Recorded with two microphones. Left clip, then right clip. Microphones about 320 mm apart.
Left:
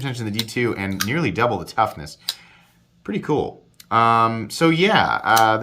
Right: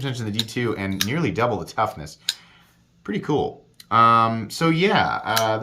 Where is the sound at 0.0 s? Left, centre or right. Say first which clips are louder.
Even; centre.